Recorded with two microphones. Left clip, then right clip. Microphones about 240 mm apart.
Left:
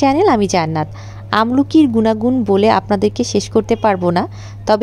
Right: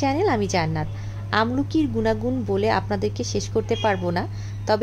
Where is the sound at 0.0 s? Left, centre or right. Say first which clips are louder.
Left 9 dB; left.